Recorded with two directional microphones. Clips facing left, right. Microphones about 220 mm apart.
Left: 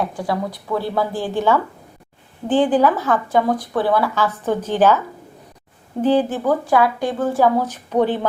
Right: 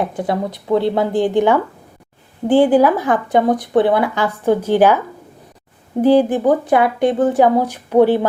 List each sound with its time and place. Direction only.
0.0 s speech: 20° right (ahead or behind)
6.0 s speech: 10° right (ahead or behind)